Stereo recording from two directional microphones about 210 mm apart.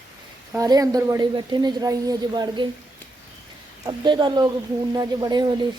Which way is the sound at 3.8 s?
20° right (ahead or behind).